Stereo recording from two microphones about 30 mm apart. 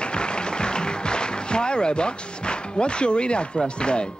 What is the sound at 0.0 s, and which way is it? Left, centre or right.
Speech, left.